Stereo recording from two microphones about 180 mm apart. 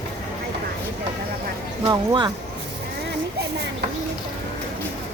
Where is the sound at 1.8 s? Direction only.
25° right (ahead or behind).